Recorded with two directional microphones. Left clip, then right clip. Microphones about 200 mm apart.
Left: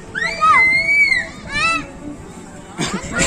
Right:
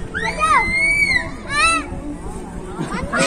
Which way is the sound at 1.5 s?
55° right (ahead or behind).